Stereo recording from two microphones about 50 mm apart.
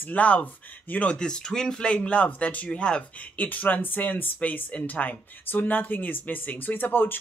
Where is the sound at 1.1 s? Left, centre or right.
Centre.